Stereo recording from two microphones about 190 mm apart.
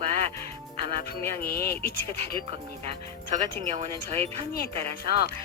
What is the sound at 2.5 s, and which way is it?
Speech, 30° right (ahead or behind).